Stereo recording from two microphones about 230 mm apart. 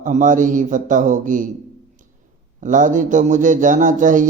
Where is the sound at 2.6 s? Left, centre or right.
Right.